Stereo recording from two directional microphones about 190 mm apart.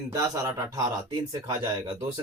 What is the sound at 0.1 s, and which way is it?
Speech, 15° right (ahead or behind).